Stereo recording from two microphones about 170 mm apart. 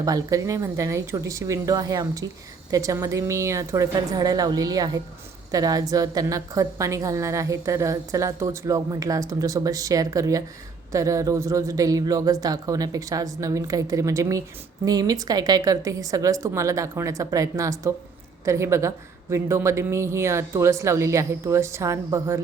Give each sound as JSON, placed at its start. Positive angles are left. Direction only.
{"t": 0.0, "sound": "a woman's voice", "side_deg": -20}